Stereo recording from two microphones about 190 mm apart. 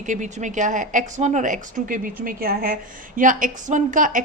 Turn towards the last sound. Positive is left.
turn(degrees=-45)  # may be behind; listen again after turning